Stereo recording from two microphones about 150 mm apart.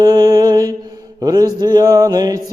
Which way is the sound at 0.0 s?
25° right (ahead or behind).